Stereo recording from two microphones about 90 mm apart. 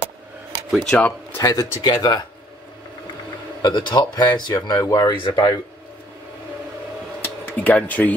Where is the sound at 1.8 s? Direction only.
50° left (ahead or behind).